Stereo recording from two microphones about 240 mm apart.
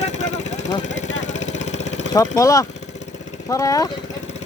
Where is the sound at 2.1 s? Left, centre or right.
Centre.